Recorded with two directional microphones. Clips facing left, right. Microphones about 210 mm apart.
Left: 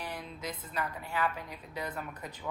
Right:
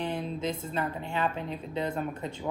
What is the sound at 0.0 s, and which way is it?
Speech, 25° right (ahead or behind).